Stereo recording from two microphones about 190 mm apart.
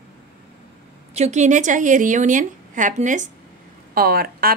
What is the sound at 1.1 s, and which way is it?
A woman's voice, 35° right (ahead or behind).